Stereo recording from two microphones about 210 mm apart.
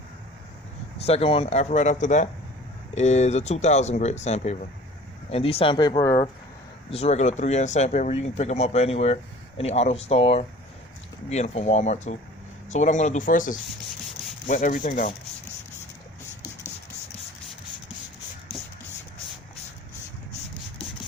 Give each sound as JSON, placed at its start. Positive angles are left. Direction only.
{"t": 1.0, "sound": "speech", "side_deg": 30}
{"t": 6.9, "sound": "speech", "side_deg": 30}